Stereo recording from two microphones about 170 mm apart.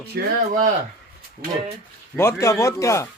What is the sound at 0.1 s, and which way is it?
Speech, 60° right (ahead or behind).